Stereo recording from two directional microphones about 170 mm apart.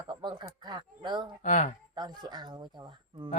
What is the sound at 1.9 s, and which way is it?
Speech, 25° right (ahead or behind).